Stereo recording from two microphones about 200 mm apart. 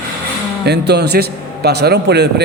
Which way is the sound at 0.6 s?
55° right (ahead or behind).